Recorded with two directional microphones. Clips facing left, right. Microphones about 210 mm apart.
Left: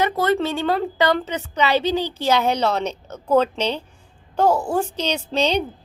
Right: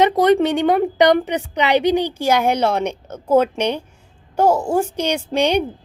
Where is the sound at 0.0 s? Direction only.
15° right (ahead or behind).